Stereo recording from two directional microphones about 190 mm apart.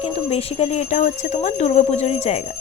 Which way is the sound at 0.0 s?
30° left (ahead or behind).